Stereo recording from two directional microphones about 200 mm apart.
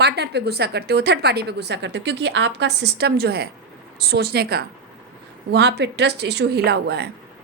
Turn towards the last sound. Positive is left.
turn(degrees=-55)  # may be behind; listen again after turning